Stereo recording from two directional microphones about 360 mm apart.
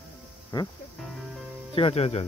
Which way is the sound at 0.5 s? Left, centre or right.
Centre.